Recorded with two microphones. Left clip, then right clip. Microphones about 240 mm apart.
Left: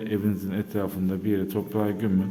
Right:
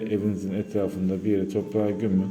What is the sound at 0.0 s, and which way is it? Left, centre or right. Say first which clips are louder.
A man's voice: right 1 dB; centre.